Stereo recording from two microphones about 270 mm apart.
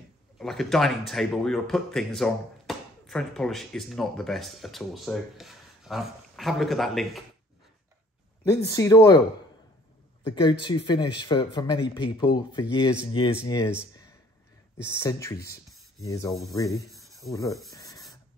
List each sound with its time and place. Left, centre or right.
0.4 s speech: centre
8.6 s speech: centre
10.4 s speech: centre
14.9 s speech: centre
17.2 s rub: centre